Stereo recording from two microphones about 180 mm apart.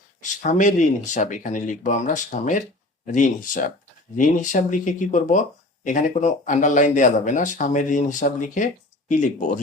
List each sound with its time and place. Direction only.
0.2 s speech: 45° left (ahead or behind)